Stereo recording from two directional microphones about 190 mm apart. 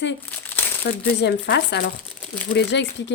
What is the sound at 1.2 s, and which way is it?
A woman's voice, 60° left (ahead or behind).